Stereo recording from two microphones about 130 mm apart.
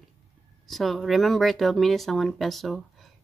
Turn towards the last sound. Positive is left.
turn(degrees=0)  # may be behind; listen again after turning